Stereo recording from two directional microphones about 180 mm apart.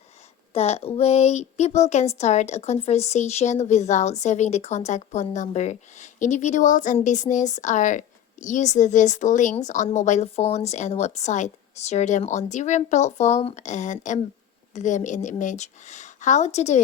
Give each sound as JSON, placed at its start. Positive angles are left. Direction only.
{"t": 0.5, "sound": "a woman's voice", "side_deg": 35}